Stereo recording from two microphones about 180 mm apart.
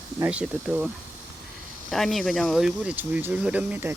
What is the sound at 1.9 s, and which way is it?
Speech, centre (ahead or behind).